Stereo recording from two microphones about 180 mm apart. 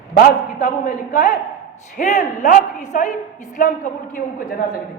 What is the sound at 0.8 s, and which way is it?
Speech, 55° left (ahead or behind).